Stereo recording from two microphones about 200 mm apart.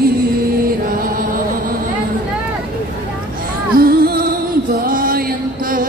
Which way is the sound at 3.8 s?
45° right (ahead or behind).